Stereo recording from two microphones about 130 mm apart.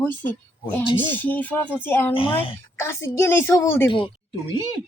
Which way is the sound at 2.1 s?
45° left (ahead or behind).